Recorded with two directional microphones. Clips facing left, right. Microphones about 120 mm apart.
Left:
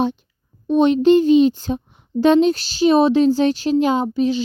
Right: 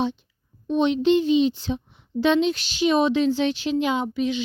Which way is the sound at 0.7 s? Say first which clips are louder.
Left 6 dB; 45° left (ahead or behind).